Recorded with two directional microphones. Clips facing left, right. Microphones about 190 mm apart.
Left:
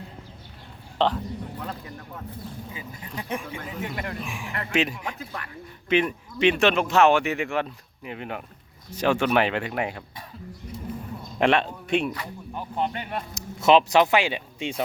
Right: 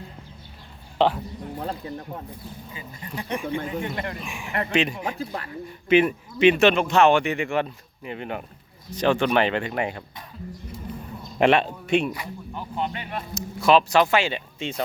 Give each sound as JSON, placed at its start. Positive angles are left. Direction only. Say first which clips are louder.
{"t": 0.9, "sound": "speech", "louder": "right 3 dB", "side_deg": -10}
{"t": 1.5, "sound": "speech", "louder": "right 5 dB", "side_deg": -30}
{"t": 3.1, "sound": "speech", "louder": "right 4 dB", "side_deg": 0}
{"t": 4.9, "sound": "speech", "louder": "right 5 dB", "side_deg": -35}
{"t": 5.9, "sound": "speech", "louder": "right 4 dB", "side_deg": -5}
{"t": 11.3, "sound": "speech", "louder": "right 3 dB", "side_deg": -5}
{"t": 12.8, "sound": "a sound", "louder": "left 2 dB", "side_deg": 40}
{"t": 13.3, "sound": "speech", "louder": "even", "side_deg": 20}